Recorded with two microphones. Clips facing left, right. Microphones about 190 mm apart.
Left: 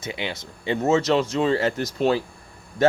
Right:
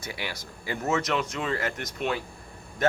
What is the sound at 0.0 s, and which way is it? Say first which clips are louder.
Speech: left 5 dB; 20° left (ahead or behind).